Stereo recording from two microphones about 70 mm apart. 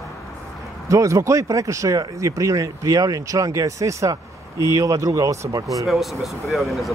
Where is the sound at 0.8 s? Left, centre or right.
Right.